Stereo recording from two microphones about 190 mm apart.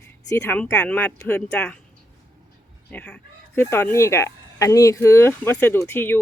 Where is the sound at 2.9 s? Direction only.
5° left (ahead or behind).